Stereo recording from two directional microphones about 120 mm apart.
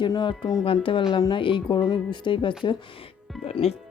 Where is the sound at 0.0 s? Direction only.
40° left (ahead or behind).